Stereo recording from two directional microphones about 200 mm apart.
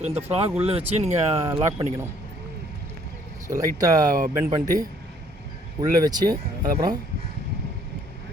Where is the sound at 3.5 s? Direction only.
15° right (ahead or behind).